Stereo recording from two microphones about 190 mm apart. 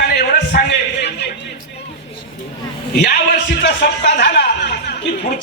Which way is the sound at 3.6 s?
65° left (ahead or behind).